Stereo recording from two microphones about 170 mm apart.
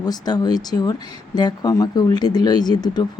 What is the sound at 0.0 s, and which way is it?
Speech, 25° left (ahead or behind).